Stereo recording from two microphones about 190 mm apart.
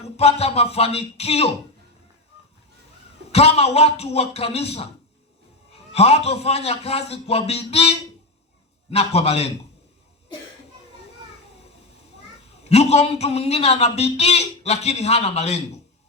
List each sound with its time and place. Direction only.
0.0 s a man's voice: 35° left (ahead or behind)
3.3 s a man's voice: 30° left (ahead or behind)
12.6 s a man's voice: 35° left (ahead or behind)